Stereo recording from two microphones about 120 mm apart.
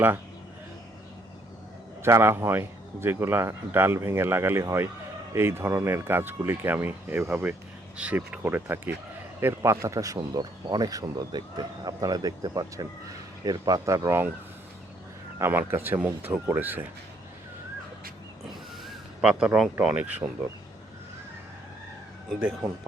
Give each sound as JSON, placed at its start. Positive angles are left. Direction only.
{"t": 2.0, "sound": "a man's voice", "side_deg": -20}
{"t": 15.4, "sound": "speech", "side_deg": -20}
{"t": 18.9, "sound": "a sound", "side_deg": -5}
{"t": 19.8, "sound": "speech", "side_deg": -15}
{"t": 22.4, "sound": "speech", "side_deg": -10}